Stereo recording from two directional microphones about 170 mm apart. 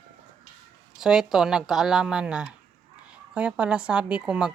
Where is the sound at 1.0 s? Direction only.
5° right (ahead or behind).